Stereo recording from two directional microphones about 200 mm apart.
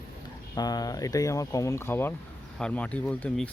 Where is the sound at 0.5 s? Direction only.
20° left (ahead or behind).